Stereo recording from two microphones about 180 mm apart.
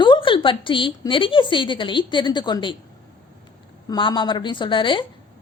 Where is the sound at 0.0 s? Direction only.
25° left (ahead or behind).